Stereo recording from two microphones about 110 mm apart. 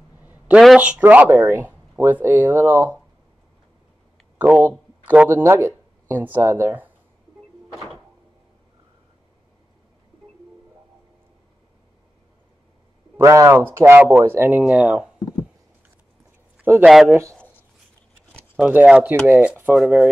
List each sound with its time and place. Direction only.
0.2 s a sound: 15° right (ahead or behind)
0.7 s speech: 10° right (ahead or behind)
4.4 s speech: 15° right (ahead or behind)
7.7 s door: centre (ahead or behind)
13.2 s speech: 25° right (ahead or behind)
14.6 s speech: 10° right (ahead or behind)
16.8 s speech: centre (ahead or behind)
17.1 s speech: 25° right (ahead or behind)
18.6 s speech: 10° right (ahead or behind)